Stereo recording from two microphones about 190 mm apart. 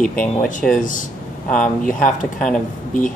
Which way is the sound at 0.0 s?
5° left (ahead or behind).